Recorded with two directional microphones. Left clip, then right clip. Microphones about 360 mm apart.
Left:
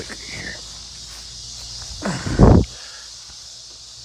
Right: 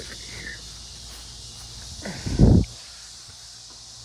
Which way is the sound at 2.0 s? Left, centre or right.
Left.